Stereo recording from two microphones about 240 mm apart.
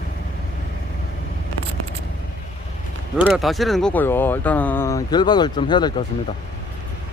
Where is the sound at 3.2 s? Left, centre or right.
Centre.